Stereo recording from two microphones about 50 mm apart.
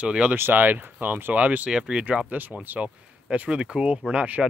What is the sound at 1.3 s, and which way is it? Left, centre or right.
Speech, right.